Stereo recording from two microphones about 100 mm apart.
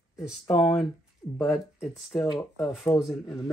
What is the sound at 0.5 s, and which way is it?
Speech, 40° left (ahead or behind).